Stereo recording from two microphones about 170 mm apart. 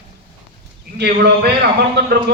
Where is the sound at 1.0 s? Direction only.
80° right.